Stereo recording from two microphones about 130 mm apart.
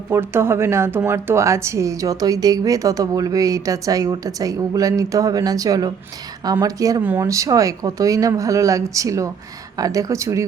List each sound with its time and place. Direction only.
0.1 s speech: 20° right (ahead or behind)
7.0 s speech: 15° right (ahead or behind)
7.3 s speech: 25° right (ahead or behind)